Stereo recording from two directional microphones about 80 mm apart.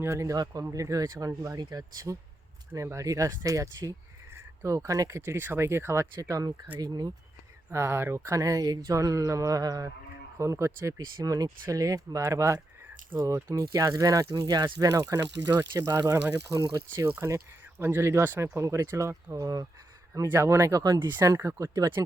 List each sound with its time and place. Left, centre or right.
0.0 s speech: right
2.7 s speech: right
6.2 s speech: right
7.7 s speech: right
8.9 s speech: right
15.9 s speech: right
16.3 s speech: right
20.2 s speech: right
20.8 s speech: right
21.3 s speech: right